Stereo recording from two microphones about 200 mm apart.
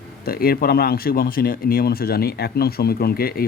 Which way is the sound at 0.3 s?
50° left (ahead or behind).